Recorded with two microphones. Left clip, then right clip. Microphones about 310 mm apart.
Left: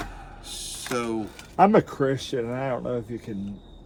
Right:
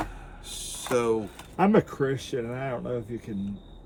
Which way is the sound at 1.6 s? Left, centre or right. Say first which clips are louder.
Left 4 dB; centre.